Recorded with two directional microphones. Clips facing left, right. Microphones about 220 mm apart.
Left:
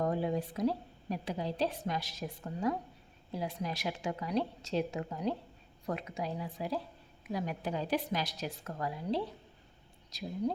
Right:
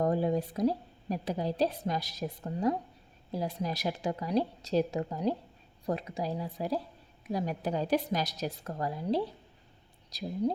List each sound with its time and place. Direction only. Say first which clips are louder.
0.0 s a woman's voice: right 4 dB; 40° right (ahead or behind)